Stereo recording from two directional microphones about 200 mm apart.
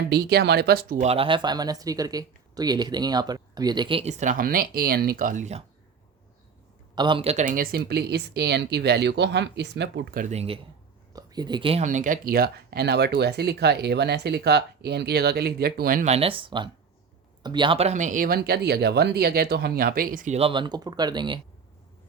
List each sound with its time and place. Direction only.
0.1 s speech: 55° right (ahead or behind)
1.0 s speech: 30° right (ahead or behind)
6.9 s a woman's voice: 25° right (ahead or behind)
11.1 s speech: 20° right (ahead or behind)